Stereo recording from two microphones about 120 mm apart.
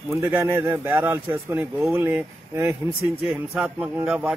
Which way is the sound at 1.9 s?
15° right (ahead or behind).